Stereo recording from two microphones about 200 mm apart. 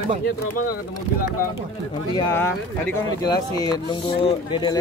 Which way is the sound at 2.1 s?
10° left (ahead or behind).